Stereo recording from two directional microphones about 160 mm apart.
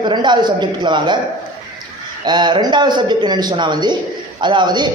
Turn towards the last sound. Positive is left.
turn(degrees=-30)  # may be behind; listen again after turning